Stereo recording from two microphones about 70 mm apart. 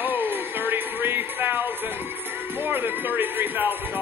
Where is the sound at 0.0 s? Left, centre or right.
Right.